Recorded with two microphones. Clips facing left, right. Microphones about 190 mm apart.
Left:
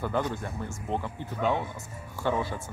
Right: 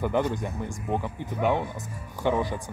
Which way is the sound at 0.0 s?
15° right (ahead or behind).